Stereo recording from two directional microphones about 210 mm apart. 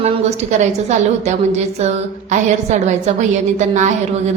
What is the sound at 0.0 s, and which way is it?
A woman's voice, 30° right (ahead or behind).